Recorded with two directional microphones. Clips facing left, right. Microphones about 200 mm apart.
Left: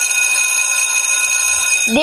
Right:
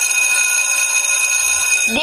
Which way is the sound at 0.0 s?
Centre (ahead or behind).